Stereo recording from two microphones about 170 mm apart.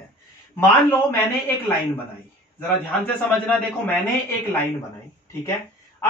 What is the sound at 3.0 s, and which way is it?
Speech, 10° left (ahead or behind).